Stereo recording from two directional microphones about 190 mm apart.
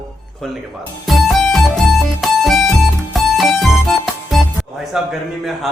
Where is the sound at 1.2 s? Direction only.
Centre (ahead or behind).